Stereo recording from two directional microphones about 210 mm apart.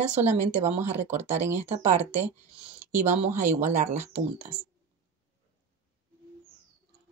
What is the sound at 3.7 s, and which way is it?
Speech, 35° right (ahead or behind).